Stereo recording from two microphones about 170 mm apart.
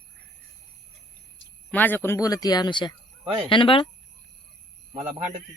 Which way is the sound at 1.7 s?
10° left (ahead or behind).